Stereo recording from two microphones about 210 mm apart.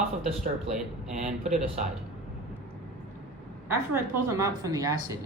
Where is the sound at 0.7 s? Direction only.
35° right (ahead or behind).